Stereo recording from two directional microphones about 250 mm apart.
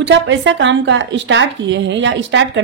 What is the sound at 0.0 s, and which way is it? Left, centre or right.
Speech, right.